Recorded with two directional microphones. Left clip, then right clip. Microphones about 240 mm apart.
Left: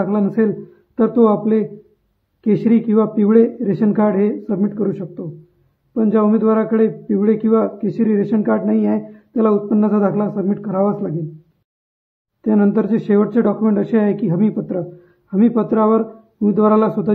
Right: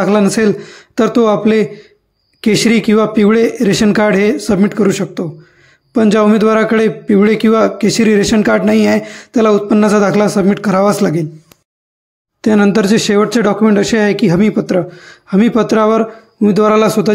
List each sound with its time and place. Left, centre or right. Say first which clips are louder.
0.0 s a man's voice: right 7 dB; right
5.9 s a man's voice: right 6 dB; right
12.4 s a man's voice: right 6 dB; right